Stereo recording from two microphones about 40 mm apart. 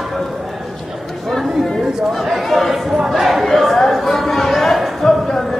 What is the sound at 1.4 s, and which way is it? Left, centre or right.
Chatter, centre.